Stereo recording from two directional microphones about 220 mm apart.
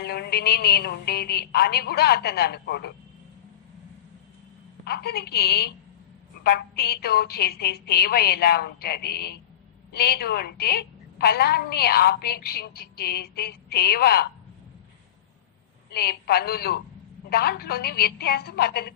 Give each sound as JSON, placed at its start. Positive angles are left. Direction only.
{"t": 0.0, "sound": "a woman's voice", "side_deg": 45}
{"t": 4.9, "sound": "a woman's voice", "side_deg": 45}
{"t": 15.9, "sound": "a woman's voice", "side_deg": 45}